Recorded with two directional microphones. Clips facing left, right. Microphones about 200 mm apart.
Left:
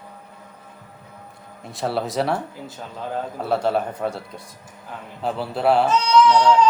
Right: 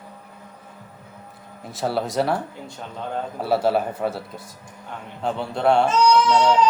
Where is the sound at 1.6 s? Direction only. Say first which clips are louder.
Even; centre (ahead or behind).